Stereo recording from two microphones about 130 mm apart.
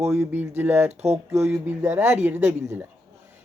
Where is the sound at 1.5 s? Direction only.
20° right (ahead or behind).